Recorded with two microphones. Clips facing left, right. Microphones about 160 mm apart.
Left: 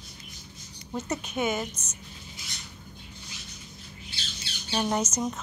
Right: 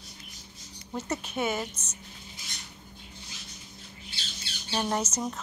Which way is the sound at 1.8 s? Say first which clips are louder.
Left 1 dB; 30° right (ahead or behind).